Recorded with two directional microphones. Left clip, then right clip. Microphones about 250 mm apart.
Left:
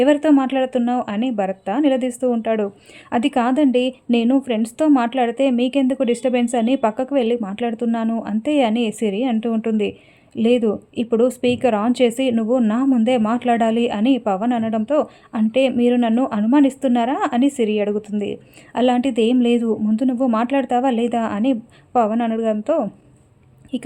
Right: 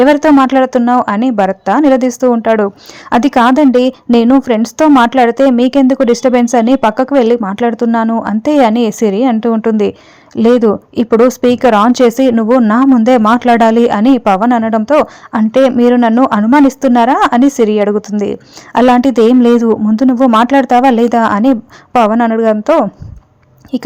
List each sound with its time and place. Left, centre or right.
0.0 s speech: centre